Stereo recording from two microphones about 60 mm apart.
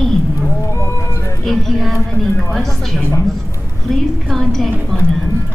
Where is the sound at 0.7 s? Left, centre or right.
Left.